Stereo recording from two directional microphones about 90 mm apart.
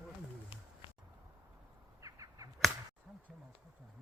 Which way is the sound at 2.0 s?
40° right (ahead or behind).